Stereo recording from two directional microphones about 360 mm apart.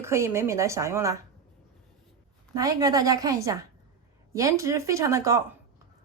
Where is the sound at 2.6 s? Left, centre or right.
Centre.